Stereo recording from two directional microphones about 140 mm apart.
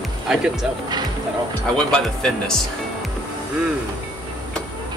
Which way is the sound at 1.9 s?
5° left (ahead or behind).